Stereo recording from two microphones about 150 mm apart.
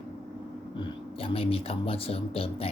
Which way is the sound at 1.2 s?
40° left (ahead or behind).